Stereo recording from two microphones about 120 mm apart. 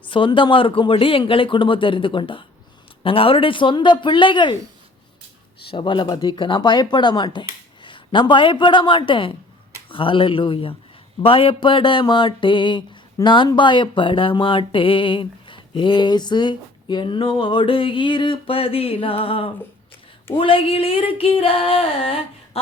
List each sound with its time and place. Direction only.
0.1 s speech: 45° left (ahead or behind)
5.7 s speech: 40° left (ahead or behind)